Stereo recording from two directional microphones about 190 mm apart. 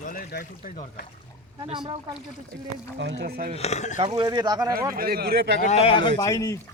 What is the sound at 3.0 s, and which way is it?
Speech, 65° right (ahead or behind).